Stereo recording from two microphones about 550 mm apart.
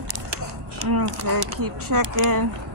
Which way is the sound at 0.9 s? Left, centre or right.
Right.